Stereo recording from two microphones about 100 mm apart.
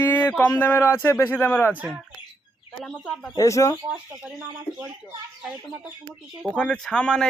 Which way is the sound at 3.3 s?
30° left (ahead or behind).